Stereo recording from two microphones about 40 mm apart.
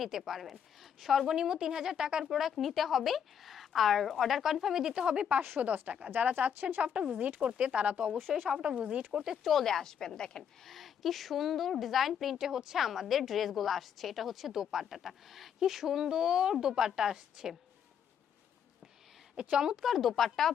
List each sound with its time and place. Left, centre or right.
0.0 s a woman's voice: centre
2.2 s a woman's voice: centre
5.0 s speech: right
5.4 s speech: right
6.8 s speech: right
9.4 s a woman's voice: centre
9.6 s a woman's voice: centre
10.7 s a woman's voice: centre
19.4 s a woman's voice: centre
19.8 s a woman's voice: centre